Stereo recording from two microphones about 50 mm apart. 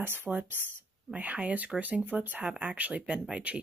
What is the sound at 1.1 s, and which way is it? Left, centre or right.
Speech, right.